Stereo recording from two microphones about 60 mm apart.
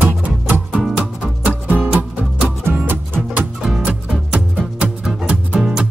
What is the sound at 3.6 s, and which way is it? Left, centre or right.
Music, centre.